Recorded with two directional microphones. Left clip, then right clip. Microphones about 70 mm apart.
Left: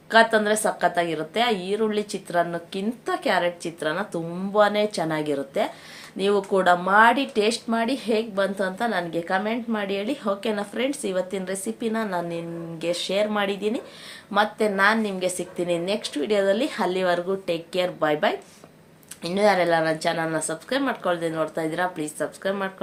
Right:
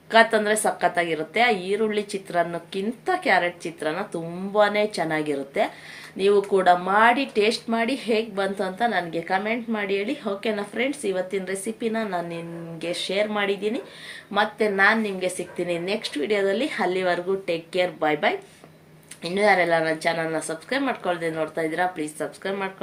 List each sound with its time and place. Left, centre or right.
0.1 s a woman's voice: left
7.7 s a woman's voice: left
15.6 s a woman's voice: left